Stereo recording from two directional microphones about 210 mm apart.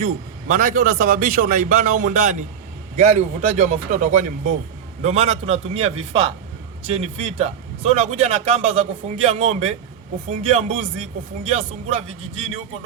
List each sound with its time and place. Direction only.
0.0 s a man's voice: 40° right (ahead or behind)